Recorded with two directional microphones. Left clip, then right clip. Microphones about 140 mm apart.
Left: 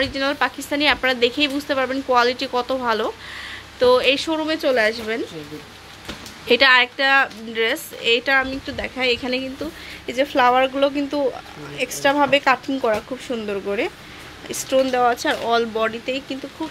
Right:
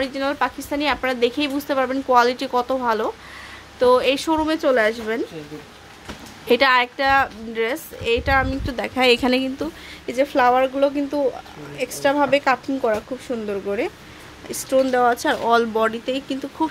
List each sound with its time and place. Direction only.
0.0 s a woman's voice: 15° right (ahead or behind)
2.8 s a woman's voice: 15° right (ahead or behind)
6.4 s a woman's voice: 20° right (ahead or behind)
8.5 s speech: 40° right (ahead or behind)
9.0 s a woman's voice: 55° right (ahead or behind)
10.0 s a woman's voice: 20° right (ahead or behind); by 16.3 s 35° right (ahead or behind)